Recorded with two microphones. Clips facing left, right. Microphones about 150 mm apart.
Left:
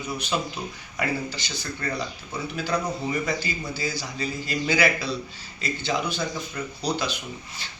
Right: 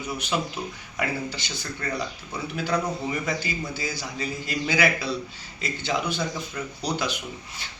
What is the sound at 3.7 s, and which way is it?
A man's voice, 15° right (ahead or behind).